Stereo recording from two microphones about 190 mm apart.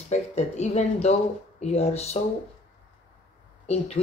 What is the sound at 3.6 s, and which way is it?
Speech, 35° left (ahead or behind).